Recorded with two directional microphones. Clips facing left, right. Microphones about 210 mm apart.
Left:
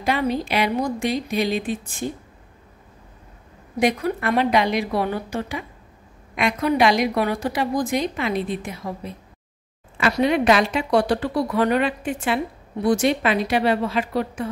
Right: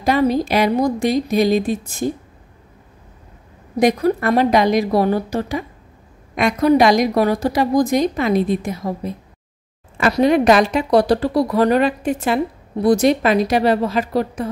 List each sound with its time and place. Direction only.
0.0 s a woman's voice: 40° right (ahead or behind)
3.8 s a woman's voice: 40° right (ahead or behind)